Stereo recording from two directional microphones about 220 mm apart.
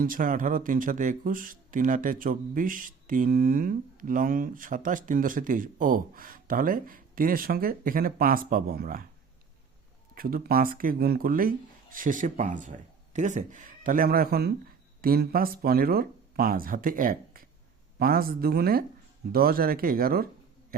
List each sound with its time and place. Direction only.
0.0 s speech: 40° right (ahead or behind)
10.2 s speech: 40° right (ahead or behind)